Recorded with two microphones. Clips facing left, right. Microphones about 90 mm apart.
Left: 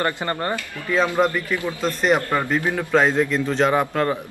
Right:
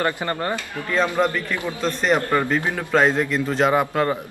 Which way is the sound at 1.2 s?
10° left (ahead or behind).